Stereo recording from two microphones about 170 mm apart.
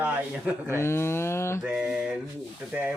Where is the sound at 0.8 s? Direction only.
15° left (ahead or behind).